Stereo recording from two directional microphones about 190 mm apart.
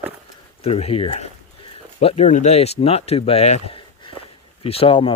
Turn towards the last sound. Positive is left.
turn(degrees=30)  # may be behind; listen again after turning